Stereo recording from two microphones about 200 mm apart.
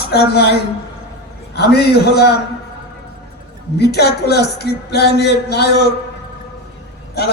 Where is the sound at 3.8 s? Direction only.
55° left (ahead or behind).